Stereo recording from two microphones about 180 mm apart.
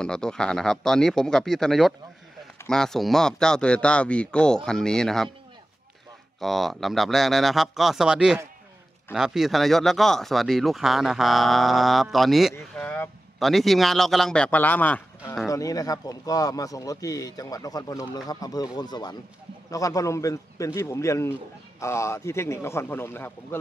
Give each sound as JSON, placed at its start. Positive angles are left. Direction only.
{"t": 0.0, "sound": "speech", "side_deg": 5}
{"t": 6.4, "sound": "a man's voice", "side_deg": 0}